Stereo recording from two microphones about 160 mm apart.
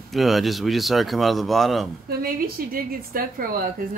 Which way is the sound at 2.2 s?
70° right (ahead or behind).